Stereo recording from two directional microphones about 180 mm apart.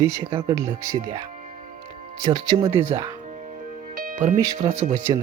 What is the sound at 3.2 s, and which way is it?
Music, 45° right (ahead or behind).